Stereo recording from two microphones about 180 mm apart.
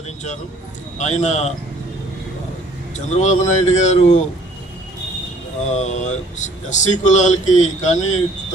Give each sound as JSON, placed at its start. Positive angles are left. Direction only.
{"t": 0.9, "sound": "speech", "side_deg": 40}
{"t": 2.9, "sound": "speech", "side_deg": 40}
{"t": 5.6, "sound": "speech", "side_deg": 40}